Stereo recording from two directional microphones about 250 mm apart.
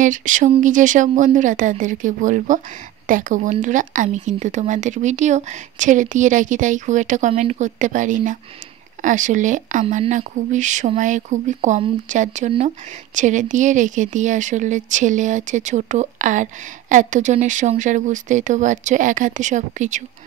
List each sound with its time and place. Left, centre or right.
0.0 s speech: right